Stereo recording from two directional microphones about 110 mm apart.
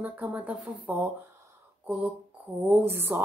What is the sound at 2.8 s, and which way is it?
Speech, 20° right (ahead or behind).